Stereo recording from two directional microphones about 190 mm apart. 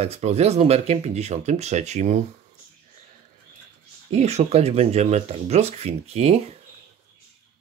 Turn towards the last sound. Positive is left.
turn(degrees=-35)  # may be behind; listen again after turning